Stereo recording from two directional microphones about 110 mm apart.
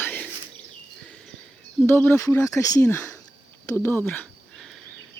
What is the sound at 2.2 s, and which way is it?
Speech, 25° left (ahead or behind).